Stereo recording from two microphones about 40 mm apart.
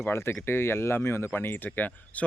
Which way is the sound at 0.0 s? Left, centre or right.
Left.